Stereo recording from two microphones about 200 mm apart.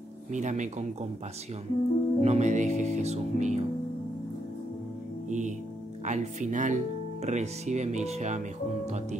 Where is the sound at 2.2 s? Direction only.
35° right (ahead or behind).